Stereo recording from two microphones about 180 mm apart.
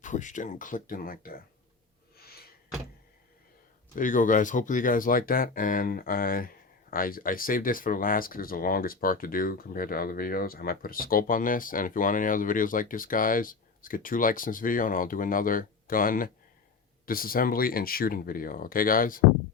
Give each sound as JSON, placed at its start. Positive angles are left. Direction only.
{"t": 0.0, "sound": "speech", "side_deg": 45}
{"t": 2.1, "sound": "a sound", "side_deg": 60}
{"t": 3.9, "sound": "speech", "side_deg": 50}